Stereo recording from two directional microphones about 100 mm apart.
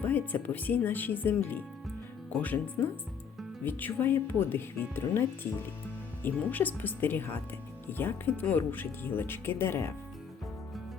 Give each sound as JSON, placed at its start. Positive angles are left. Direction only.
{"t": 0.0, "sound": "speech", "side_deg": 15}